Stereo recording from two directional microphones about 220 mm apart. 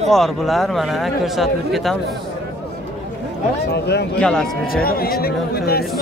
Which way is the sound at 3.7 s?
50° left (ahead or behind).